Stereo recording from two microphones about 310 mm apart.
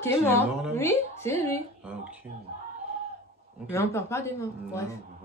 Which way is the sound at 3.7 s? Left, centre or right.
Centre.